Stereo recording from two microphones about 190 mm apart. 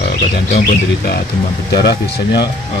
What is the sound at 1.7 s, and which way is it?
Speech, 60° left (ahead or behind).